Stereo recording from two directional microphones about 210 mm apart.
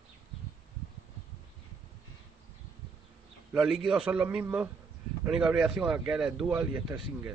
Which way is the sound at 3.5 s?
Centre (ahead or behind).